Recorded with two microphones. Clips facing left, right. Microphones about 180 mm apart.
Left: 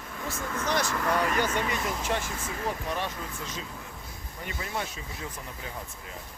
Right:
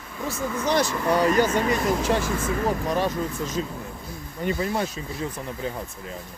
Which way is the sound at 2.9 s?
40° right (ahead or behind).